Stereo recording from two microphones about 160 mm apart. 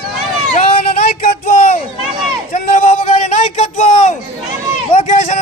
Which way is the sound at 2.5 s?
50° left (ahead or behind).